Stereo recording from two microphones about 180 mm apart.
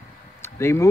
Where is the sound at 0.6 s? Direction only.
15° left (ahead or behind).